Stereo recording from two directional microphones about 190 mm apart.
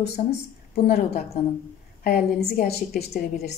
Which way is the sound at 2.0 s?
50° left (ahead or behind).